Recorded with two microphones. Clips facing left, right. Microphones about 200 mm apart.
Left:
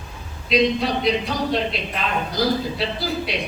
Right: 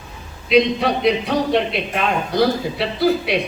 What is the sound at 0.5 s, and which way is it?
A man's voice, 60° right (ahead or behind).